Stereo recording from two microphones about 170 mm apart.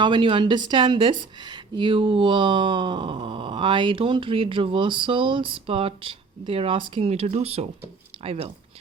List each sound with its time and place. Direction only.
0.0 s a woman's voice: 30° right (ahead or behind)